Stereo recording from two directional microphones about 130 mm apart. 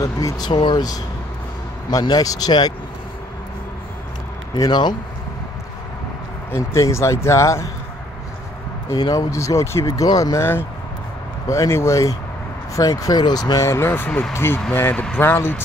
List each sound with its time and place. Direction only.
0.0 s speech: 25° left (ahead or behind)
0.5 s speech: 35° left (ahead or behind)
4.6 s speech: 35° left (ahead or behind)
6.5 s speech: 20° left (ahead or behind)
8.9 s speech: 30° left (ahead or behind)